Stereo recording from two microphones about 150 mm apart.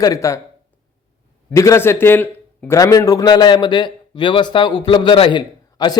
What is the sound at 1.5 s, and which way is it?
A man's voice, 20° left (ahead or behind).